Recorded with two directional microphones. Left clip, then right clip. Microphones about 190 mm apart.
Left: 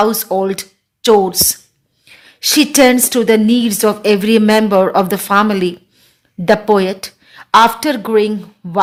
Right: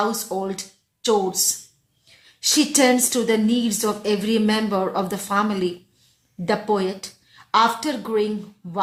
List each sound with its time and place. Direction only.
0.0 s a woman's voice: 55° left (ahead or behind)